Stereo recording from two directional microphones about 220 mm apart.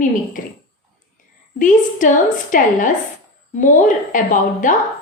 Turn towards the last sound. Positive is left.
turn(degrees=35)  # may be behind; listen again after turning